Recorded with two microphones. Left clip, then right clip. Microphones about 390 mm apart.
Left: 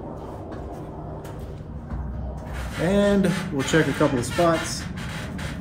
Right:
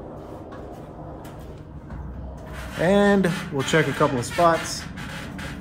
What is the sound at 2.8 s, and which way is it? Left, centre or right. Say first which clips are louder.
Speech: right 2 dB; centre.